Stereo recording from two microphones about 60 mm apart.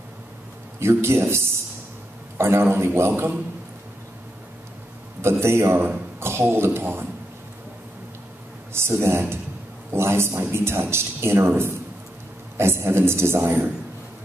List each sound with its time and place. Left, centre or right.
0.7 s a man's voice: right
5.4 s a man's voice: right
8.7 s a man's voice: right